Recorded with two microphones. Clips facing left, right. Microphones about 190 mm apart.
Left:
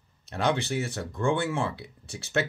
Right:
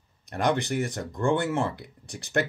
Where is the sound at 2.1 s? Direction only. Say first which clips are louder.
Right 1 dB; 15° right (ahead or behind).